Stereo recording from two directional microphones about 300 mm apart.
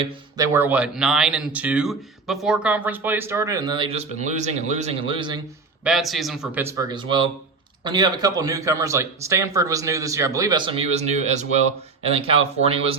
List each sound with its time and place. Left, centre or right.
0.0 s speech: centre
5.8 s a man's voice: centre